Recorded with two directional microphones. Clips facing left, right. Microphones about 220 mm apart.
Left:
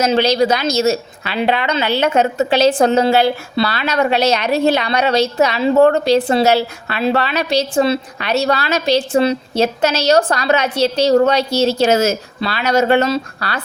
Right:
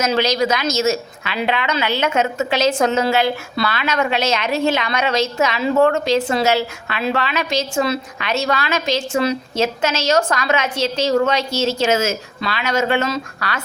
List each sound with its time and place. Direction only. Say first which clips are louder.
0.0 s a woman's voice: left 4 dB; 30° left (ahead or behind)